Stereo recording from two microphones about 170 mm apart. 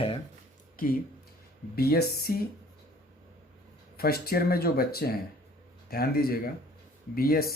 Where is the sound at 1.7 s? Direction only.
65° left (ahead or behind).